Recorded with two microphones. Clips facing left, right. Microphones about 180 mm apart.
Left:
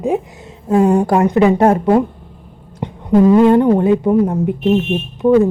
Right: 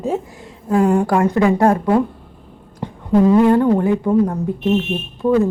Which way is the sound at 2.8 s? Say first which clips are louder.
Left 3 dB; 20° left (ahead or behind).